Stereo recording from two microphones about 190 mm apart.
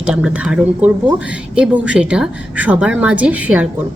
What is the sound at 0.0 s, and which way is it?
A woman's voice, 5° right (ahead or behind).